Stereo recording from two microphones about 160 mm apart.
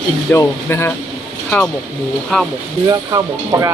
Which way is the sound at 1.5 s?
5° left (ahead or behind).